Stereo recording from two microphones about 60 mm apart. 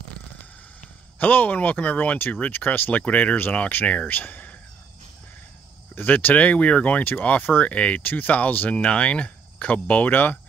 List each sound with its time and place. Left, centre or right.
1.2 s speech: left
5.9 s speech: left